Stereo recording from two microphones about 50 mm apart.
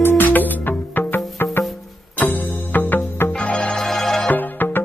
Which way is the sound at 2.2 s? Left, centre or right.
Left.